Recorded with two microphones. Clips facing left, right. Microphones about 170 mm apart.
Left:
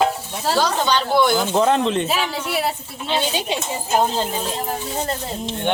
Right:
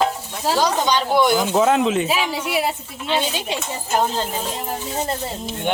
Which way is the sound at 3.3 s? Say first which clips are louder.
Left 2 dB; 15° left (ahead or behind).